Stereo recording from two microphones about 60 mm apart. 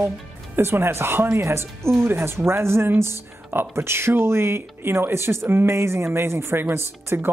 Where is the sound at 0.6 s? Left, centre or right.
Right.